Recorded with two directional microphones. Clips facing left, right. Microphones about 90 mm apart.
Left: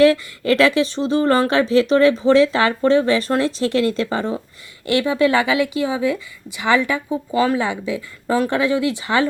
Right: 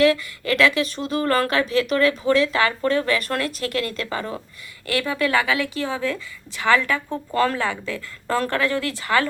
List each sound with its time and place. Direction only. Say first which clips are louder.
0.0 s a woman's voice: left 4 dB; 30° left (ahead or behind)